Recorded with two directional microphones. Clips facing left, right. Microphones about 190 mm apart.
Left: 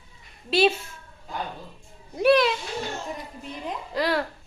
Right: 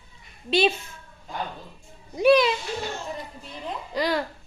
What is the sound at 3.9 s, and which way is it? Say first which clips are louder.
Speech: even; centre (ahead or behind).